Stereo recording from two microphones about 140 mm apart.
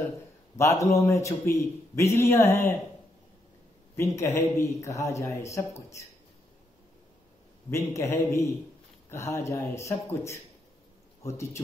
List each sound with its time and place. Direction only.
0.6 s a man's voice: 20° left (ahead or behind)
3.9 s a man's voice: 20° left (ahead or behind)
7.7 s a man's voice: 20° left (ahead or behind)